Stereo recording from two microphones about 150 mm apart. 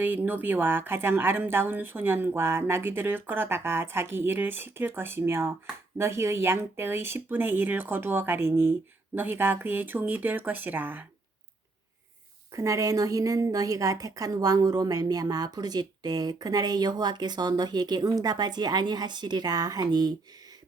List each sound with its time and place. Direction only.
0.0 s a woman's voice: 10° right (ahead or behind)
12.5 s a woman's voice: 20° right (ahead or behind)